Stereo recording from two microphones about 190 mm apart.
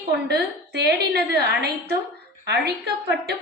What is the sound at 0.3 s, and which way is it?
A woman's voice, 60° right (ahead or behind).